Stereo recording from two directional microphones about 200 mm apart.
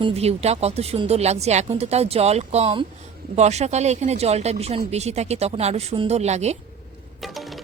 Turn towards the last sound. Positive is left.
turn(degrees=0)  # may be behind; listen again after turning